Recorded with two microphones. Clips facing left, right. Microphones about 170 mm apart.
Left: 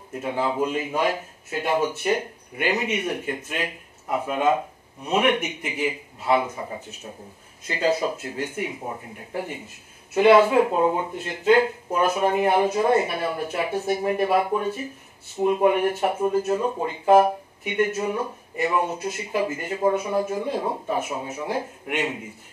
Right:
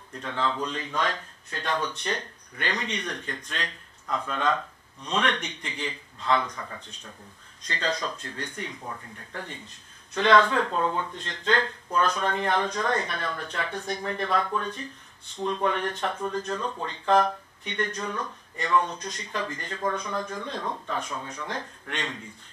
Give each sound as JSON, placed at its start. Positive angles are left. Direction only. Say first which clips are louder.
{"t": 0.1, "sound": "speech", "louder": "left 4 dB", "side_deg": 10}
{"t": 6.5, "sound": "speech", "louder": "left 6 dB", "side_deg": 25}
{"t": 7.6, "sound": "speech", "louder": "left 7 dB", "side_deg": 10}
{"t": 8.8, "sound": "speech", "louder": "left 5 dB", "side_deg": 20}